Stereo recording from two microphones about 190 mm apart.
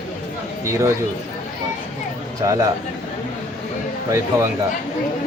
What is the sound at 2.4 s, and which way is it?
Speech, 15° right (ahead or behind).